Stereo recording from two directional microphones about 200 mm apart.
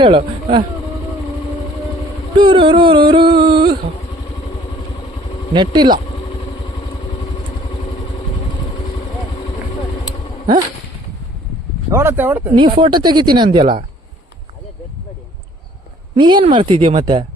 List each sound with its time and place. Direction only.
0.0 s speech: 25° right (ahead or behind)
2.4 s a sound: 25° right (ahead or behind)
5.5 s speech: 25° right (ahead or behind)
11.9 s speech: 15° right (ahead or behind)
12.5 s speech: 25° right (ahead or behind)
16.1 s speech: 25° right (ahead or behind)